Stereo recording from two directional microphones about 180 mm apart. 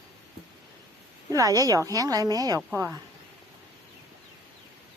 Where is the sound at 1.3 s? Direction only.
20° right (ahead or behind).